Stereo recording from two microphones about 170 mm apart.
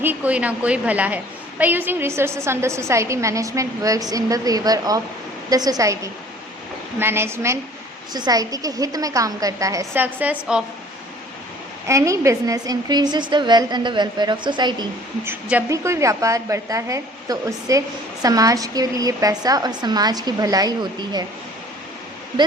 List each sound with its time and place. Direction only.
0.0 s a woman's voice: 10° right (ahead or behind)
11.9 s a woman's voice: 20° right (ahead or behind)
15.2 s a woman's voice: 10° right (ahead or behind)